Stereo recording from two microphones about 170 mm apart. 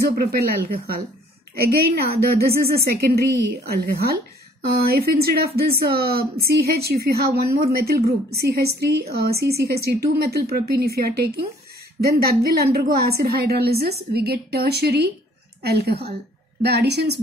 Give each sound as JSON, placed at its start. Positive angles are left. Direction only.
{"t": 0.1, "sound": "a woman's voice", "side_deg": -60}